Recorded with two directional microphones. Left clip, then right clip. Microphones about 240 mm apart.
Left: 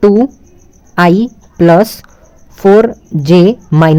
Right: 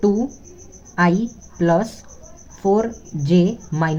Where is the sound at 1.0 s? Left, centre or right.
Left.